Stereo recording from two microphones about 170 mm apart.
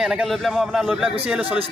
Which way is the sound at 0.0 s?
5° right (ahead or behind).